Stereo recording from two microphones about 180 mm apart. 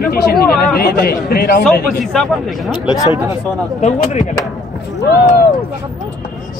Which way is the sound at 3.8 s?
40° left (ahead or behind).